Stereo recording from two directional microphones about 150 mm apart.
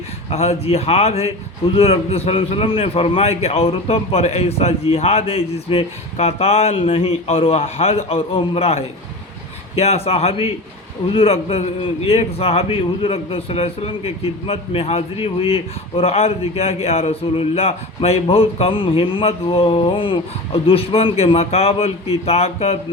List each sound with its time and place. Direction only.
0.3 s a man's voice: 45° left (ahead or behind)